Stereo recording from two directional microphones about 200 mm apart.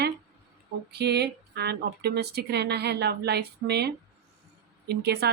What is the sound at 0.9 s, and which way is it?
Speech, 55° right (ahead or behind).